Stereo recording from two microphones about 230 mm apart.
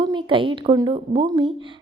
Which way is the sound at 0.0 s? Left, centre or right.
Right.